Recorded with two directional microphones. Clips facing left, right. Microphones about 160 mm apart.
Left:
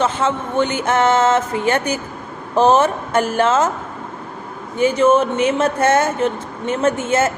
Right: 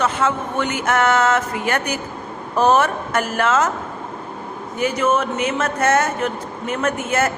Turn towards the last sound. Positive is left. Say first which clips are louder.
# left 3 dB
turn(degrees=25)  # may be behind; listen again after turning